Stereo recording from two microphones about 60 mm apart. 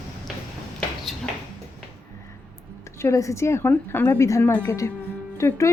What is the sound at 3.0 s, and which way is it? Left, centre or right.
A woman's voice, left.